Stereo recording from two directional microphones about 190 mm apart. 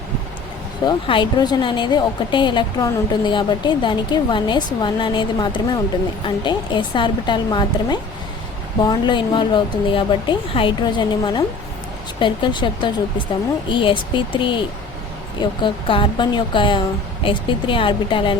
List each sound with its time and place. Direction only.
0.9 s a woman's voice: 25° left (ahead or behind)